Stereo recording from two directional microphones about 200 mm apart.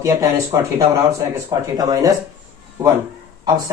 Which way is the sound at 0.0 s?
15° right (ahead or behind).